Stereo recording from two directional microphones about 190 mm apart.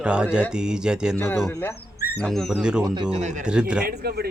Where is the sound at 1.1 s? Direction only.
10° left (ahead or behind); by 2.8 s 5° right (ahead or behind).